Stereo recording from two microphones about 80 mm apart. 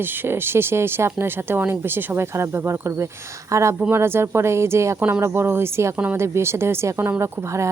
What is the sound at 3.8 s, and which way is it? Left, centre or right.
A woman's voice, right.